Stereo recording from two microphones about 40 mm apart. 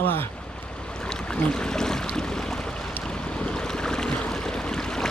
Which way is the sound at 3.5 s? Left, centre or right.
Centre.